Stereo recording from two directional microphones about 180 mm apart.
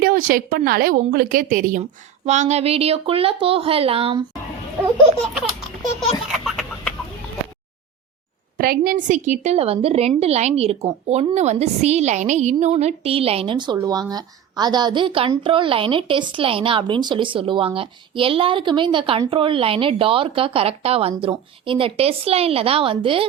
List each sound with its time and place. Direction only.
0.0 s a woman's voice: 50° right (ahead or behind); by 4.2 s 30° right (ahead or behind)
6.3 s a sound: centre (ahead or behind)
8.5 s a woman's voice: 55° right (ahead or behind); by 23.2 s 30° right (ahead or behind)